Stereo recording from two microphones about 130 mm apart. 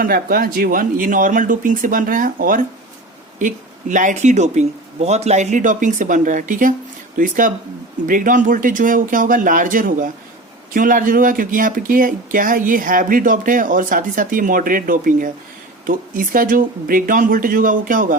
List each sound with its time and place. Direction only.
0.0 s speech: 90° right
3.3 s speech: 75° right (ahead or behind)